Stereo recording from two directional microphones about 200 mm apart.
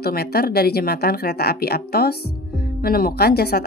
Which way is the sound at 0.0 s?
50° left (ahead or behind).